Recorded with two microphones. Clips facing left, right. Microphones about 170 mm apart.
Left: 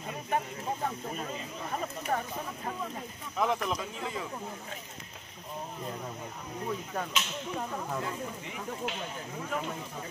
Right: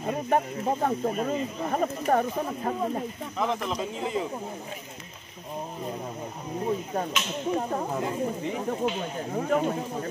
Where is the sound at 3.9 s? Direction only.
20° right (ahead or behind).